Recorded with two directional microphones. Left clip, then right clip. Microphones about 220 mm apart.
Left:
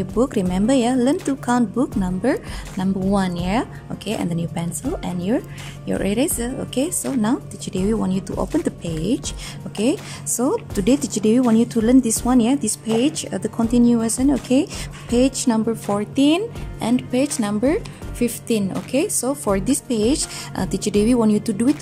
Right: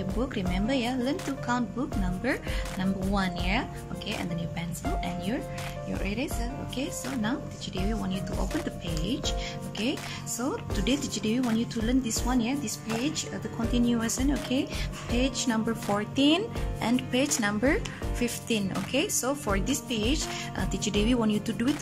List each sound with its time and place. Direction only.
0.2 s speech: 30° left (ahead or behind)